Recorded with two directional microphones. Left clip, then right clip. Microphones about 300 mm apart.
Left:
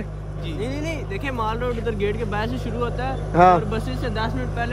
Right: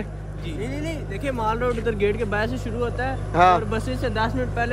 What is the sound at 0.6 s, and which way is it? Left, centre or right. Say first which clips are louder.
Speech: left 2 dB; left.